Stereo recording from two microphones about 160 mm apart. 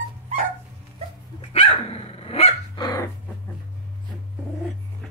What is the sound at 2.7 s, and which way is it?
Dog, 25° left (ahead or behind).